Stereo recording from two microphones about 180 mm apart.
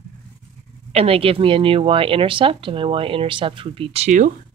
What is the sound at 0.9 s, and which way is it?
A woman's voice, 35° right (ahead or behind).